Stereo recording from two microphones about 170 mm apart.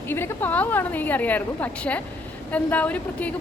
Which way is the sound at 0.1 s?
10° left (ahead or behind).